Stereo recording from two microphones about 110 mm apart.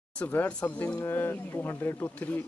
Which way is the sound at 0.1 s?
15° left (ahead or behind).